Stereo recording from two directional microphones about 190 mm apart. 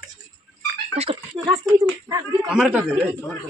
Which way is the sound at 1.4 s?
15° right (ahead or behind).